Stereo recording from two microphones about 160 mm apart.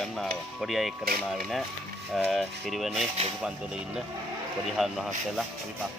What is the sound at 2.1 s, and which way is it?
Speech, centre (ahead or behind).